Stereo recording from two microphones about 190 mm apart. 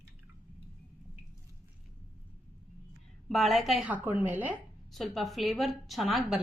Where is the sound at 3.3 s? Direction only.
Centre (ahead or behind).